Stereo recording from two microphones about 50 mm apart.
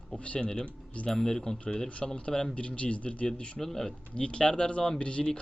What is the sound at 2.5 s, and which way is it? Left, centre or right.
Speech, left.